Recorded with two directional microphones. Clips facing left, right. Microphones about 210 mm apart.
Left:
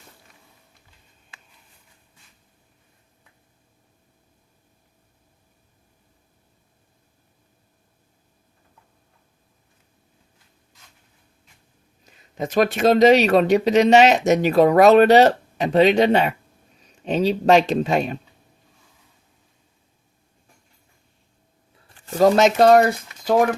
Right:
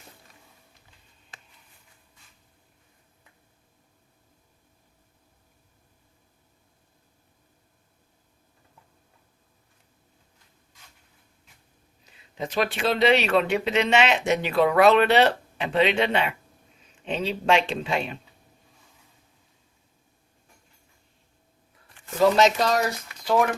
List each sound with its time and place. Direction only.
12.3 s speech: 45° left (ahead or behind)
21.8 s a sound: 35° left (ahead or behind)
22.4 s speech: 55° left (ahead or behind)